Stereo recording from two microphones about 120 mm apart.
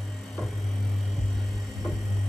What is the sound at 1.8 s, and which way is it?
Music, 5° left (ahead or behind).